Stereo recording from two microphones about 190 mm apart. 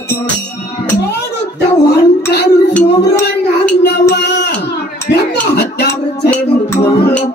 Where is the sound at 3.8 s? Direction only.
60° left (ahead or behind).